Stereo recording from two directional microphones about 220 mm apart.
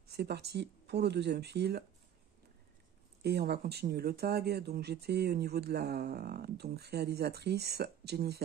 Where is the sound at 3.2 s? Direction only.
45° right (ahead or behind).